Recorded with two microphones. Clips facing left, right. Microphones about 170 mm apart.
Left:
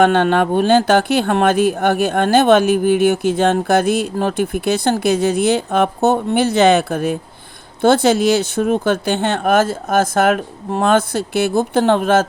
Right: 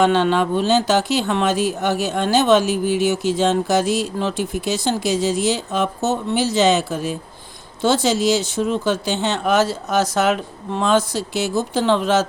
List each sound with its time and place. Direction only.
0.0 s speech: 55° left (ahead or behind)